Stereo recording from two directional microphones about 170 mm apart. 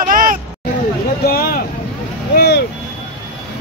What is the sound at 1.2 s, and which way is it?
Vehicle, 60° left (ahead or behind).